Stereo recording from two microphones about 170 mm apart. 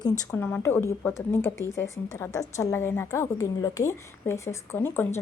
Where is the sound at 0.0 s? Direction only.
15° left (ahead or behind).